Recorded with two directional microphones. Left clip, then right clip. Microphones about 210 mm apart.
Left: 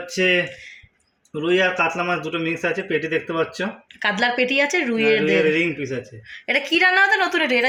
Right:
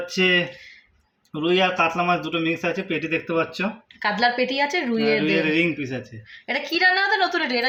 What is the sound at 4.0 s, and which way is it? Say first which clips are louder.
A woman's voice: left 1 dB; 5° left (ahead or behind).